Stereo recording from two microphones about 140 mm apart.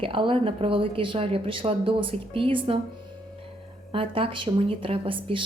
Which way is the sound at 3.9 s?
40° right (ahead or behind).